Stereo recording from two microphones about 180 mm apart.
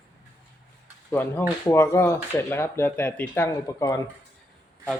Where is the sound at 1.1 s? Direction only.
10° left (ahead or behind).